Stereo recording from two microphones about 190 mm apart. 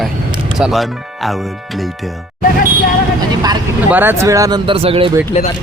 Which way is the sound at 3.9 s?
10° right (ahead or behind).